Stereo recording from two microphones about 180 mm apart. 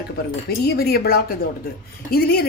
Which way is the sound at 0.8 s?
60° left (ahead or behind).